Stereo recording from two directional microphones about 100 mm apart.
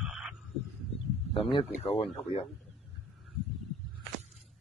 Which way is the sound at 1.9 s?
75° left (ahead or behind).